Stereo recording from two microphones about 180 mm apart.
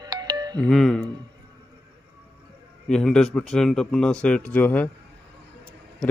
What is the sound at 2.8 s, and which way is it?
Speech, 5° left (ahead or behind).